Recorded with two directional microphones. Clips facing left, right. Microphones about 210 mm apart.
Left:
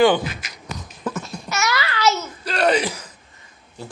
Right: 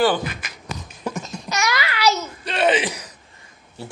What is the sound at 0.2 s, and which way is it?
Speech, 50° right (ahead or behind).